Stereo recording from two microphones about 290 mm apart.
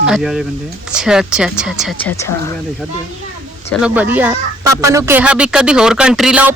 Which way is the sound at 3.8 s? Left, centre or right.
Centre.